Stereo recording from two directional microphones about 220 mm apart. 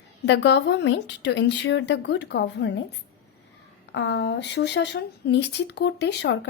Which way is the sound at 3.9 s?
50° left (ahead or behind).